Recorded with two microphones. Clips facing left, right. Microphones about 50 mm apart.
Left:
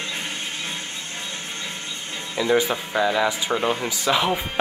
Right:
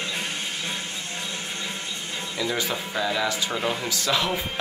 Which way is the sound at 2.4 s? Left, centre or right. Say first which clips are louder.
Left 7 dB; centre.